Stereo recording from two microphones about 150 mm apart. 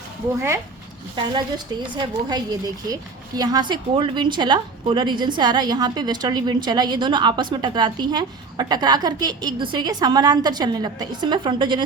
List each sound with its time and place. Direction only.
1.1 s a woman's voice: 30° right (ahead or behind)